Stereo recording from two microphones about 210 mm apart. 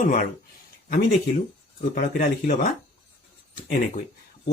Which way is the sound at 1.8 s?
40° left (ahead or behind).